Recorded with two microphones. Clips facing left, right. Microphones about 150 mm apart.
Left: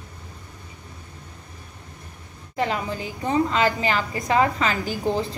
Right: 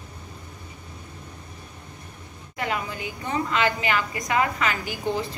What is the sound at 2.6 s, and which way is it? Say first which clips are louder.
A woman's voice: left 4 dB; 30° left (ahead or behind).